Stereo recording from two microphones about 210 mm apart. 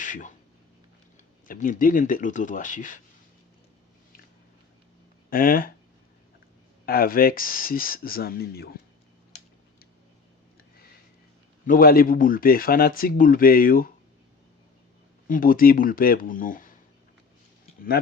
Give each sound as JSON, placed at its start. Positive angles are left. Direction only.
{"t": 0.0, "sound": "speech", "side_deg": 40}
{"t": 5.3, "sound": "speech", "side_deg": 45}
{"t": 6.8, "sound": "speech", "side_deg": 45}
{"t": 11.6, "sound": "speech", "side_deg": 45}
{"t": 15.3, "sound": "speech", "side_deg": 40}